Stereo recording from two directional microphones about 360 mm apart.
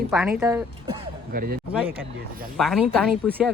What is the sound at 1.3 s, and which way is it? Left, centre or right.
Speech, right.